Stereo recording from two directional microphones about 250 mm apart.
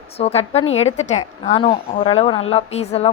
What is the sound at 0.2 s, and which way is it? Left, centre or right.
A woman's voice, left.